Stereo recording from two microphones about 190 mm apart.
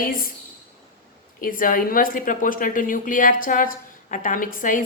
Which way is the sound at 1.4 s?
45° left (ahead or behind).